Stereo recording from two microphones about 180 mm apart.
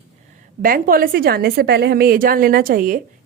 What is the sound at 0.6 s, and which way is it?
A woman's voice, 50° right (ahead or behind).